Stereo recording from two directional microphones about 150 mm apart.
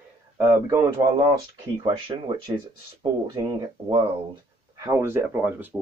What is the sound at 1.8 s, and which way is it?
Speech, 30° right (ahead or behind).